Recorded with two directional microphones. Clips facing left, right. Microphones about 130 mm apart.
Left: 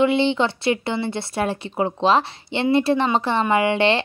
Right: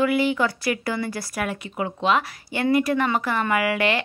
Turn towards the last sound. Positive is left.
turn(degrees=30)  # may be behind; listen again after turning